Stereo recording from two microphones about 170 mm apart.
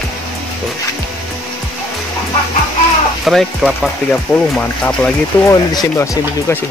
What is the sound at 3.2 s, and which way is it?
Speech, centre (ahead or behind).